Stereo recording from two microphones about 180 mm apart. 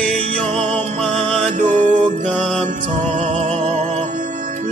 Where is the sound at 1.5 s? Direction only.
45° right (ahead or behind).